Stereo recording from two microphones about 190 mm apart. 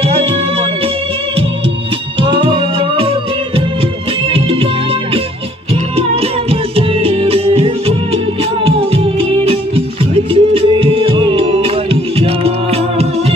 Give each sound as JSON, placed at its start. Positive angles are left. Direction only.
{"t": 0.0, "sound": "music", "side_deg": -30}
{"t": 2.1, "sound": "music", "side_deg": -25}
{"t": 6.5, "sound": "music", "side_deg": -30}